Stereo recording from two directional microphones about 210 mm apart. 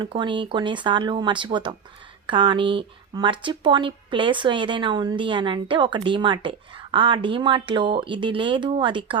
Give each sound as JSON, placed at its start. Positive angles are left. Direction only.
{"t": 0.0, "sound": "speech", "side_deg": -20}